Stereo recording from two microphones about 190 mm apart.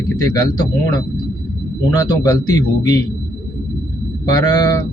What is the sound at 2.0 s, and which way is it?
Speech, 20° left (ahead or behind).